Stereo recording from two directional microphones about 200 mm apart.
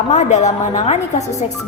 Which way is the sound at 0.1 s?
35° left (ahead or behind).